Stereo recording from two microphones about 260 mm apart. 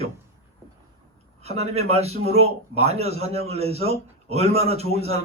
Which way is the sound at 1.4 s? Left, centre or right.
Right.